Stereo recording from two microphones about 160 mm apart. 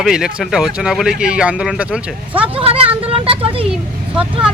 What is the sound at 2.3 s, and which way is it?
Speech, 35° right (ahead or behind).